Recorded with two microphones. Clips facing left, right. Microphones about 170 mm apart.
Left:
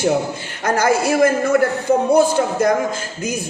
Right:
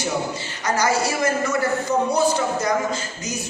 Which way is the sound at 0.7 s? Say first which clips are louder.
Left 5 dB; 55° left (ahead or behind).